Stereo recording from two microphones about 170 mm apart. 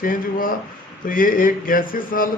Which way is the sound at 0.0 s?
55° left (ahead or behind).